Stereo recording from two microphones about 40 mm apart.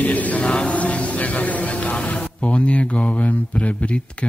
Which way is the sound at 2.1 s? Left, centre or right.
Left.